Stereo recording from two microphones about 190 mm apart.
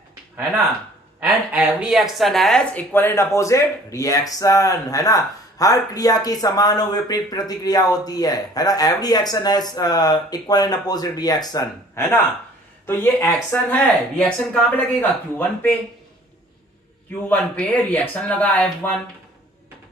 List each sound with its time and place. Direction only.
1.2 s speech: 10° right (ahead or behind); by 15.7 s 10° left (ahead or behind)
17.3 s speech: 10° left (ahead or behind)